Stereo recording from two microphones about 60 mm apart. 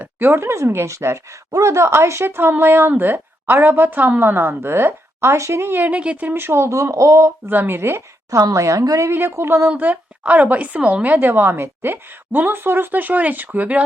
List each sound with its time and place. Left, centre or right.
0.0 s a woman's voice: right
5.7 s a woman's voice: right
6.3 s speech: right
7.4 s a woman's voice: right
8.3 s speech: right
9.0 s a woman's voice: right
9.6 s a woman's voice: right
11.3 s a woman's voice: right